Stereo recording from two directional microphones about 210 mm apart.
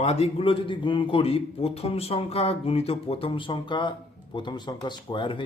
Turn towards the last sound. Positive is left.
turn(degrees=25)  # may be behind; listen again after turning